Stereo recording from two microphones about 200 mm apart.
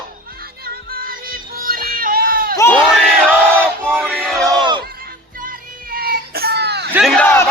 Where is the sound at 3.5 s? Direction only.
10° right (ahead or behind).